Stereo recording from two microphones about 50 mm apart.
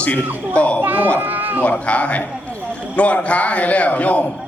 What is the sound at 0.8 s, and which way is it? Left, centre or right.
Speech, right.